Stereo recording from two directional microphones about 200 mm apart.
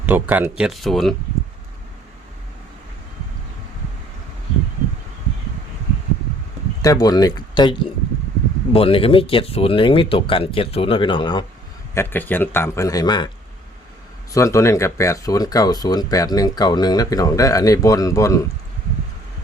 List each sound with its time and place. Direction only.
0.0 s speech: 10° right (ahead or behind)
6.8 s speech: 20° left (ahead or behind)
11.9 s speech: 10° left (ahead or behind)
14.3 s speech: 15° left (ahead or behind)